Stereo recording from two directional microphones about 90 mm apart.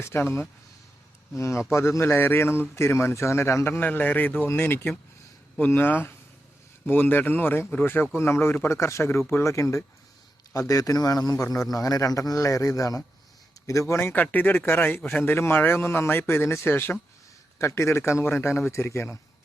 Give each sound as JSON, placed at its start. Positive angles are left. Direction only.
{"t": 0.0, "sound": "a man's voice", "side_deg": 25}
{"t": 14.1, "sound": "speech", "side_deg": 20}